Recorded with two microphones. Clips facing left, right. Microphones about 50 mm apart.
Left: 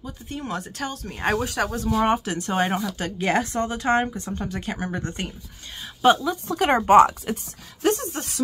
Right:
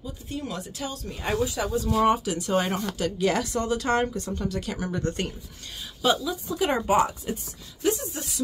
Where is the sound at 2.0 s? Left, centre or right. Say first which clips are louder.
Even; left.